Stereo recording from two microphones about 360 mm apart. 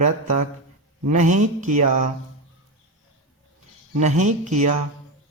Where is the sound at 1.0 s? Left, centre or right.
Right.